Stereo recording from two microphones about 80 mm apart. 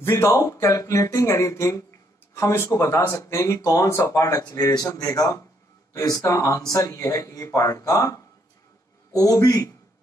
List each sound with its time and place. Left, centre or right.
0.0 s speech: left
3.3 s speech: left
3.9 s speech: left